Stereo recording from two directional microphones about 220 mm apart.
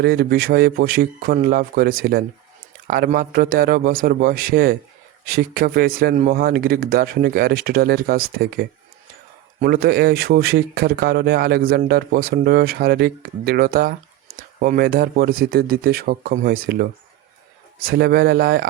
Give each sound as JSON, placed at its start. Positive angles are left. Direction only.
{"t": 0.0, "sound": "speech", "side_deg": -45}
{"t": 17.8, "sound": "speech", "side_deg": -45}